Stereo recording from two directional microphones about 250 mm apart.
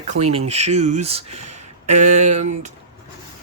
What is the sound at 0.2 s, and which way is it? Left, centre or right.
Speech, right.